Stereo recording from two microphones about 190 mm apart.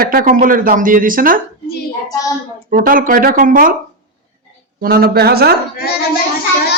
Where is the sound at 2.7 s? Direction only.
50° right (ahead or behind).